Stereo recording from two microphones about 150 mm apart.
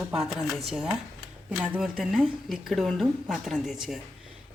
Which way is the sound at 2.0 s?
Centre (ahead or behind).